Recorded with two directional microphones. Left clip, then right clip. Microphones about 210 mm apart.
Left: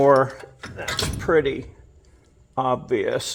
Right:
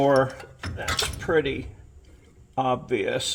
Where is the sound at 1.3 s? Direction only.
20° left (ahead or behind).